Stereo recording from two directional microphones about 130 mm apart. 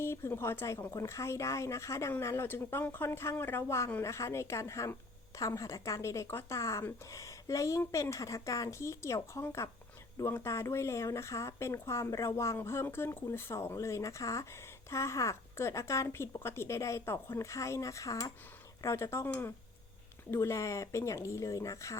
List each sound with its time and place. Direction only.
0.0 s speech: 20° left (ahead or behind)